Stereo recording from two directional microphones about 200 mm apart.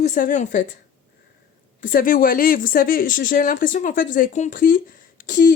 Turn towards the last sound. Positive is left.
turn(degrees=45)  # may be behind; listen again after turning